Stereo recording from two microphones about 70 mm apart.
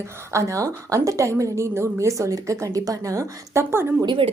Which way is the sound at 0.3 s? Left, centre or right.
Right.